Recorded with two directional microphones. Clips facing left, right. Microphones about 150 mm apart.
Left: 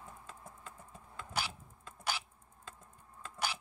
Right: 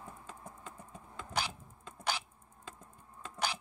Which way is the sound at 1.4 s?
15° right (ahead or behind).